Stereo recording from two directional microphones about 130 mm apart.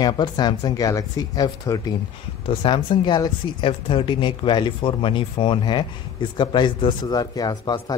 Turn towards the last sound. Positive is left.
turn(degrees=30)  # may be behind; listen again after turning